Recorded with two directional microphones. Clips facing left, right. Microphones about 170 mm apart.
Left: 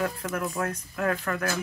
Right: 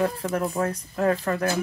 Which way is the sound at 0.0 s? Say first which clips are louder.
Right 5 dB; 35° right (ahead or behind).